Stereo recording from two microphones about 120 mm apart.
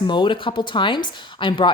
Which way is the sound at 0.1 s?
40° left (ahead or behind).